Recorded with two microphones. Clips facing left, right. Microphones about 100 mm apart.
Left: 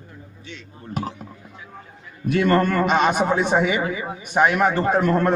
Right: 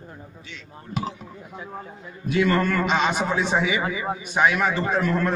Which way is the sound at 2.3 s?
50° left (ahead or behind).